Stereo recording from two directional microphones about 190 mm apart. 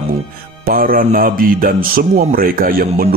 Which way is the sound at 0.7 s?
50° right (ahead or behind).